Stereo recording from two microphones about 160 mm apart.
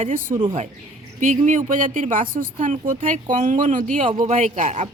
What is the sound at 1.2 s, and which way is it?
Speech, 50° right (ahead or behind).